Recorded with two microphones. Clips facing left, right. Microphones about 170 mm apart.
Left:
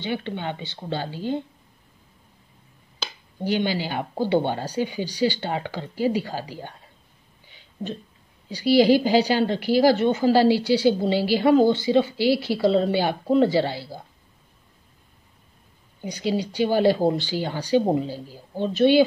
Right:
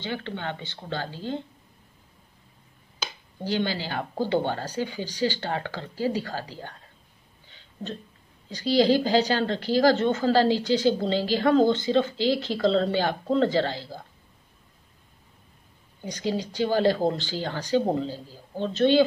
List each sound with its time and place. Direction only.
0.0 s a woman's voice: 15° left (ahead or behind)
3.4 s a woman's voice: 15° left (ahead or behind)
7.4 s a sound: 15° left (ahead or behind)
8.5 s a woman's voice: 10° left (ahead or behind)
16.0 s a woman's voice: 10° left (ahead or behind)